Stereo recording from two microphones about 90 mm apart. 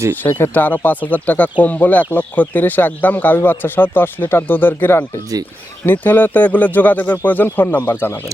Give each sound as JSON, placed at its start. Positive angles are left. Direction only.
{"t": 0.2, "sound": "speech", "side_deg": 25}